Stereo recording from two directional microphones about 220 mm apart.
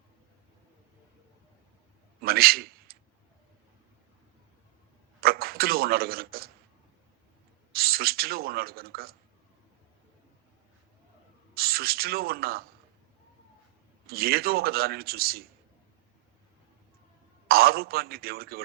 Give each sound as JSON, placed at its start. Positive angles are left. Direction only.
{"t": 2.2, "sound": "a sound", "side_deg": -45}
{"t": 5.2, "sound": "a sound", "side_deg": -45}
{"t": 7.7, "sound": "speech", "side_deg": -45}
{"t": 11.5, "sound": "speech", "side_deg": -45}
{"t": 14.1, "sound": "speech", "side_deg": -45}
{"t": 17.5, "sound": "speech", "side_deg": -45}